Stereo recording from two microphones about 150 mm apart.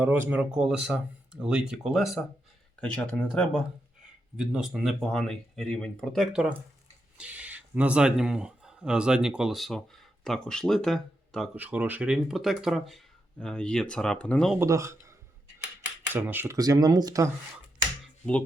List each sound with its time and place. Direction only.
0.0 s speech: 10° right (ahead or behind)
11.5 s speech: 10° right (ahead or behind); by 14.6 s 5° left (ahead or behind)
14.6 s speech: 20° right (ahead or behind)
16.1 s speech: 15° right (ahead or behind)
16.6 s speech: 25° right (ahead or behind)